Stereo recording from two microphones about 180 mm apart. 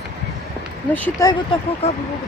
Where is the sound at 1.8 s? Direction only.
35° left (ahead or behind).